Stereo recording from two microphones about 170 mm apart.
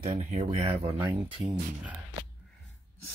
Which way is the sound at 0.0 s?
40° right (ahead or behind).